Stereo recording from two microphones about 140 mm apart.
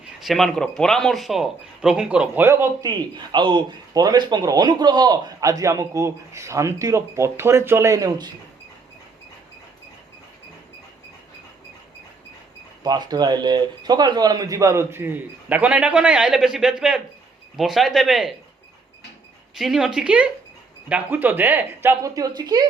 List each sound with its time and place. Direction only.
0.0 s speech: centre (ahead or behind); by 2.9 s 20° right (ahead or behind)
3.3 s a man's voice: 35° right (ahead or behind)
12.8 s a man's voice: 30° right (ahead or behind); by 18.3 s centre (ahead or behind)
19.5 s speech: centre (ahead or behind); by 22.6 s 30° right (ahead or behind)